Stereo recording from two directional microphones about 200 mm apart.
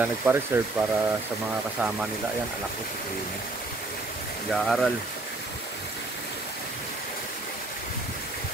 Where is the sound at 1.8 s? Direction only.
5° right (ahead or behind).